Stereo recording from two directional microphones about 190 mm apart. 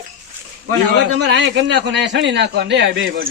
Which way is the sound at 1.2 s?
70° right (ahead or behind).